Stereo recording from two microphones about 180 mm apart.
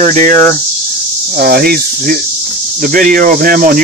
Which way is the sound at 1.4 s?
60° right (ahead or behind).